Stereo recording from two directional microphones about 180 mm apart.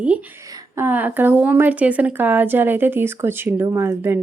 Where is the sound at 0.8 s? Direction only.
10° right (ahead or behind).